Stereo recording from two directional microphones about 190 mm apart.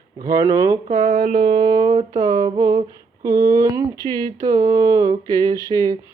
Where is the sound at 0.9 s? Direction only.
40° right (ahead or behind).